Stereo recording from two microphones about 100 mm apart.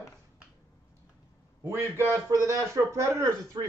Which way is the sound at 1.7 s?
30° right (ahead or behind).